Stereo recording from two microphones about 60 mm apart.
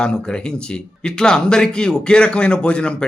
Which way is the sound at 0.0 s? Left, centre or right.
Centre.